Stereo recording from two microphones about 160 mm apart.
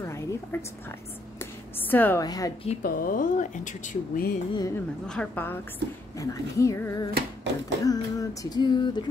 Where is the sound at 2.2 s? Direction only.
25° left (ahead or behind).